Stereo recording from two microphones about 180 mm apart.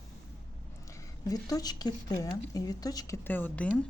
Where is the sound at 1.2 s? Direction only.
20° left (ahead or behind).